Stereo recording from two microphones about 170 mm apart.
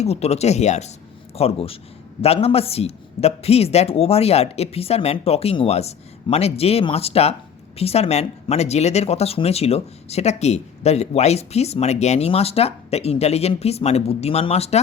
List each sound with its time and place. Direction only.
0.0 s speech: 40° left (ahead or behind)